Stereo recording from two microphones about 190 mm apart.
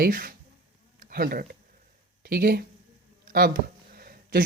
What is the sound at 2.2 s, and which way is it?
Speech, 50° right (ahead or behind).